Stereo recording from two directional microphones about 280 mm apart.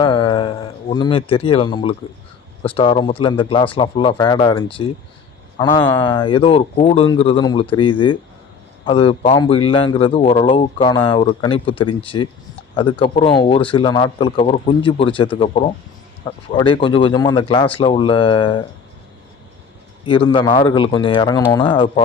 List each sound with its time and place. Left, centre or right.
0.0 s a man's voice: centre
20.1 s a man's voice: centre